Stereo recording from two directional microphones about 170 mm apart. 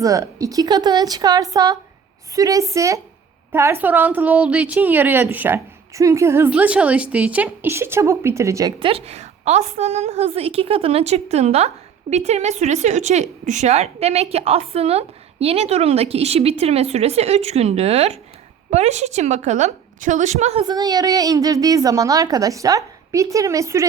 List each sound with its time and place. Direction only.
0.0 s a woman's voice: 20° right (ahead or behind)
8.8 s a woman's voice: 35° right (ahead or behind)
20.7 s a woman's voice: 25° right (ahead or behind)